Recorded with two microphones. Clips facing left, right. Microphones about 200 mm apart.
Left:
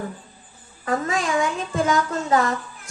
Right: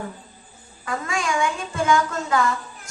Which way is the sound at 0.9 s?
35° left (ahead or behind).